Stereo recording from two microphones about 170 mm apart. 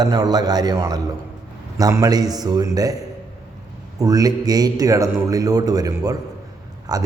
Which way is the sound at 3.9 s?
20° right (ahead or behind).